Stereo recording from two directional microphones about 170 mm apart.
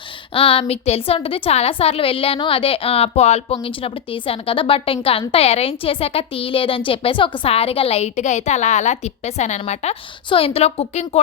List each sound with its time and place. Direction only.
0.3 s a woman's voice: 35° left (ahead or behind)